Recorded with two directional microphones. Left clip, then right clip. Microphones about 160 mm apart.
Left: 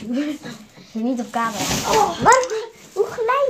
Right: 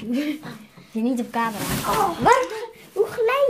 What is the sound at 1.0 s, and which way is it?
Speech, 30° right (ahead or behind).